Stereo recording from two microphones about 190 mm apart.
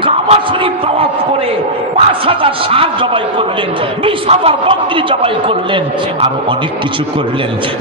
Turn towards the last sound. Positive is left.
turn(degrees=-30)  # may be behind; listen again after turning